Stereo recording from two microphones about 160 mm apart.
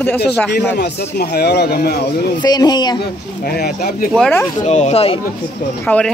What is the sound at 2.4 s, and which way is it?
Speech, 25° left (ahead or behind).